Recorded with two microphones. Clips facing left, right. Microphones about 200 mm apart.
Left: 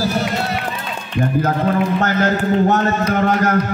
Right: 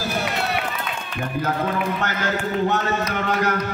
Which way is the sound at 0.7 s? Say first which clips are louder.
Left 3 dB; 40° left (ahead or behind).